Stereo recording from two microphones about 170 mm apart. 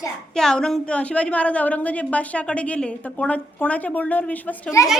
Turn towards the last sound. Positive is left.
turn(degrees=10)  # may be behind; listen again after turning